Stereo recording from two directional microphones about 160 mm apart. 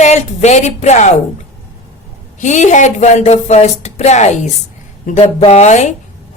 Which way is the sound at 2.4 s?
50° left (ahead or behind).